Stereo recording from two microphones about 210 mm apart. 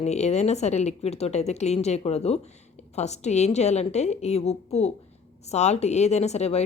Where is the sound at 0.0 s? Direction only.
30° left (ahead or behind).